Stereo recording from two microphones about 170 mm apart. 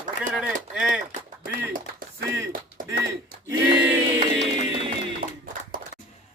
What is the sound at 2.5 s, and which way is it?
Speech, 55° right (ahead or behind).